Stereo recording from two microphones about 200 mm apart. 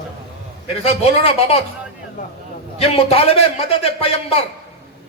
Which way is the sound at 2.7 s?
30° left (ahead or behind).